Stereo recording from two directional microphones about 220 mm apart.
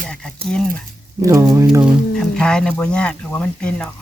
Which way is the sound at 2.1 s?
5° left (ahead or behind).